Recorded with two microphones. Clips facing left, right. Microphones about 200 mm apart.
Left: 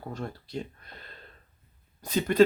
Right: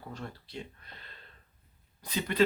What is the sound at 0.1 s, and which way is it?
Speech, 45° left (ahead or behind).